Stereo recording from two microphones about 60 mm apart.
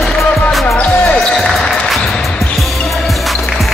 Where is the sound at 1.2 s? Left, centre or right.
Centre.